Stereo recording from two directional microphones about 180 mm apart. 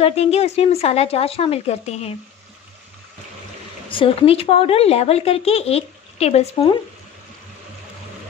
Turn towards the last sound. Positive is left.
turn(degrees=35)  # may be behind; listen again after turning